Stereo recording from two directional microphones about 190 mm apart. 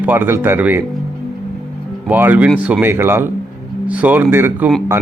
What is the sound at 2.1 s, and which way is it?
Speech, 10° right (ahead or behind).